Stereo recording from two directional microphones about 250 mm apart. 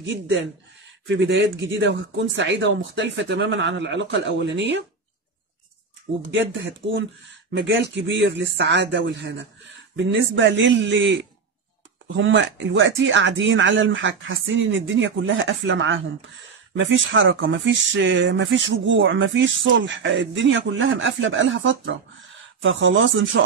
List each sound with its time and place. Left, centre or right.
0.0 s speech: right
7.5 s speech: right
12.2 s speech: right